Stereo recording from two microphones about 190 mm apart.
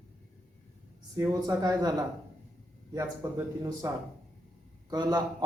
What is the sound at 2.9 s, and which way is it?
Speech, 20° right (ahead or behind).